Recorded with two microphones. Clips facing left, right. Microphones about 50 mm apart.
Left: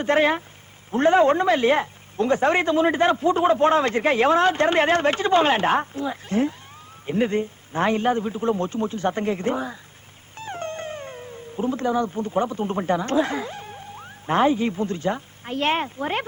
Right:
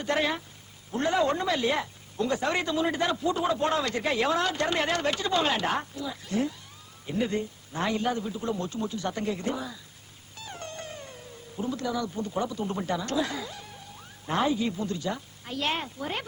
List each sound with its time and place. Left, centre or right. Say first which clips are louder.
0.0 s speech: left 8 dB; left